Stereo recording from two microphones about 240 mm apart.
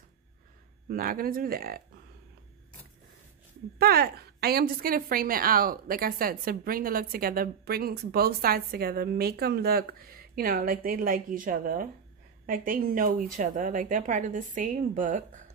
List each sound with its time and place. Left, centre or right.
0.8 s a woman's voice: right
3.7 s a woman's voice: right